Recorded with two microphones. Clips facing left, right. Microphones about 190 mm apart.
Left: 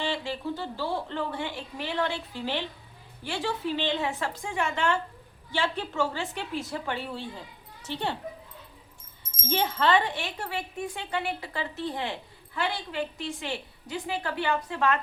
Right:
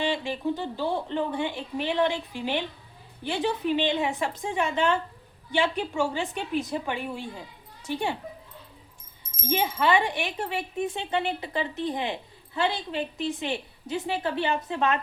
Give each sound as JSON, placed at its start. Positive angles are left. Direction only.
{"t": 0.0, "sound": "a woman's voice", "side_deg": -15}
{"t": 9.4, "sound": "speech", "side_deg": -10}